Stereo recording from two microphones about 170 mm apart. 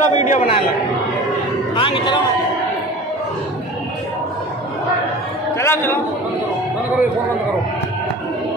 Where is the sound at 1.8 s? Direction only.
30° left (ahead or behind).